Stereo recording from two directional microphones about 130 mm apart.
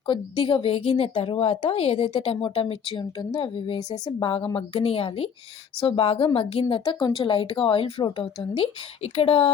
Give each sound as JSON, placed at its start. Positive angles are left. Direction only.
{"t": 0.1, "sound": "a woman's voice", "side_deg": 40}